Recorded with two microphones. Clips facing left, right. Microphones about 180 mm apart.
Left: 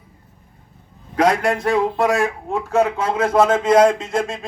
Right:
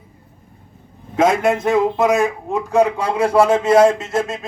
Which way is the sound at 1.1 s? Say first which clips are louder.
Right 2 dB; 25° right (ahead or behind).